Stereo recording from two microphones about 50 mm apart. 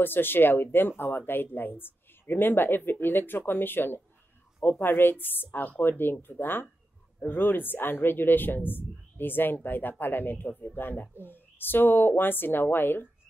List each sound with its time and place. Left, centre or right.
0.0 s speech: left